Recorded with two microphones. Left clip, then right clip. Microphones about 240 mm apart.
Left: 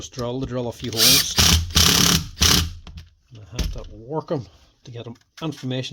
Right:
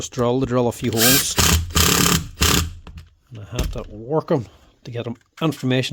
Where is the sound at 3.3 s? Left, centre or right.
Right.